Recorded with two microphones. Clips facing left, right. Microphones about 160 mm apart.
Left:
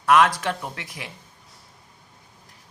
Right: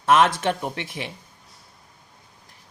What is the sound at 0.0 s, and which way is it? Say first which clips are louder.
A man's voice: even; 25° right (ahead or behind).